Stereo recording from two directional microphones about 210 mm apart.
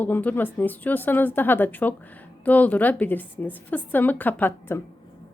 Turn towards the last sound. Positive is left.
turn(degrees=10)  # may be behind; listen again after turning